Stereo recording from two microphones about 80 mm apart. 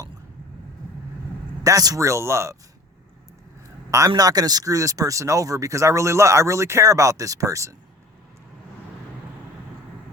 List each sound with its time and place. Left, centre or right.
1.6 s speech: right
4.2 s speech: right